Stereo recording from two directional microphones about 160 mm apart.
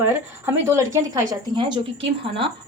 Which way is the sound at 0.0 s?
15° right (ahead or behind).